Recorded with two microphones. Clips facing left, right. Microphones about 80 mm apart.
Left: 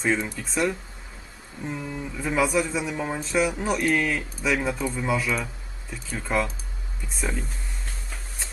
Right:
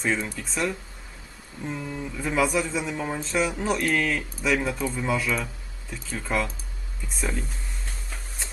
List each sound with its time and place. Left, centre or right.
0.0 s speech: centre